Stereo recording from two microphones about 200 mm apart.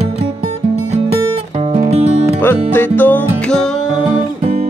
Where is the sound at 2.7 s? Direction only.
10° left (ahead or behind).